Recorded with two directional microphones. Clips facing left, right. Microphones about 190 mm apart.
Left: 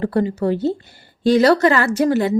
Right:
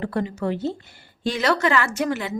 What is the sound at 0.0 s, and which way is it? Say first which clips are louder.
A woman's voice: left 6 dB; 35° left (ahead or behind).